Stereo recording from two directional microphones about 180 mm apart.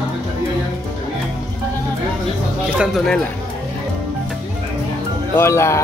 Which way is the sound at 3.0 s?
5° left (ahead or behind).